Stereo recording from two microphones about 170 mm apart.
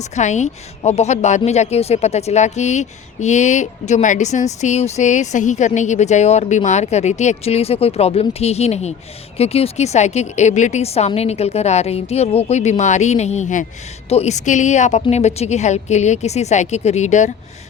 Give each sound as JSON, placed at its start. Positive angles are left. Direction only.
{"t": 0.0, "sound": "a woman's voice", "side_deg": 45}